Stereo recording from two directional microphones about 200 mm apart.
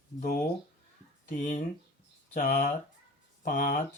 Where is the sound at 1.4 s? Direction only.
35° left (ahead or behind).